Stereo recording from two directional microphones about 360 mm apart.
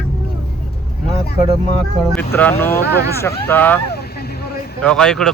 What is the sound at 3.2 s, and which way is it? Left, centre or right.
Speech, centre.